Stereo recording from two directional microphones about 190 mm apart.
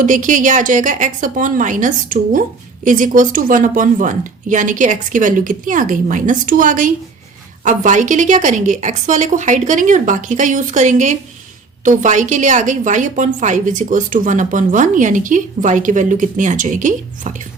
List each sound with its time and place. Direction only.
0.0 s a woman's voice: 45° right (ahead or behind)